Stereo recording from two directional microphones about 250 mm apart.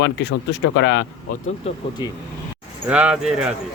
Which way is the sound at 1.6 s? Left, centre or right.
Left.